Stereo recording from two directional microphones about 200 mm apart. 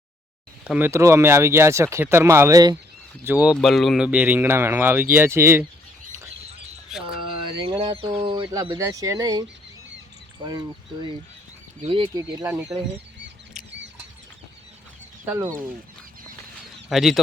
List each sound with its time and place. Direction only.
0.6 s speech: 10° right (ahead or behind)
3.2 s speech: 5° right (ahead or behind)
6.9 s speech: centre (ahead or behind)
7.7 s speech: 25° right (ahead or behind)
11.9 s speech: 25° right (ahead or behind)
15.2 s speech: 15° right (ahead or behind)
16.9 s speech: centre (ahead or behind)